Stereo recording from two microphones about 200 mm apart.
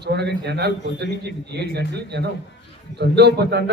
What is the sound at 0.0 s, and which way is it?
A man's voice, 55° right (ahead or behind).